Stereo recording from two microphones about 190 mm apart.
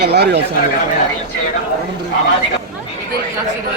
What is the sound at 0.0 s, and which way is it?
Speech, 60° right (ahead or behind).